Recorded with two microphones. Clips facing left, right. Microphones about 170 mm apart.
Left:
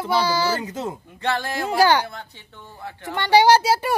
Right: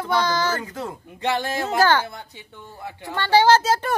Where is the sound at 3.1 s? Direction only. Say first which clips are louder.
Left 1 dB; 15° left (ahead or behind).